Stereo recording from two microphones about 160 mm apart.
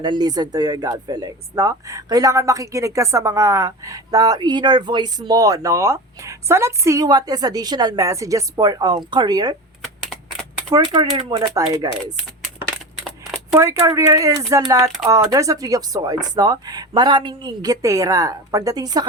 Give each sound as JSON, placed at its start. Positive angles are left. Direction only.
{"t": 0.0, "sound": "speech", "side_deg": -25}
{"t": 10.8, "sound": "speech", "side_deg": -25}
{"t": 13.6, "sound": "speech", "side_deg": -20}